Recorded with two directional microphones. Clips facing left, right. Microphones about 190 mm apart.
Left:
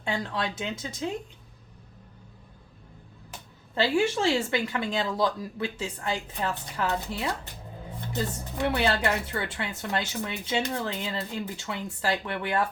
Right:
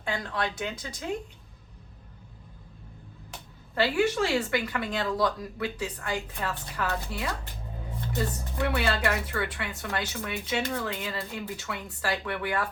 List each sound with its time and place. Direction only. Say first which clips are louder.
0.0 s speech: left 1 dB; 20° left (ahead or behind)
3.8 s speech: even; 25° left (ahead or behind)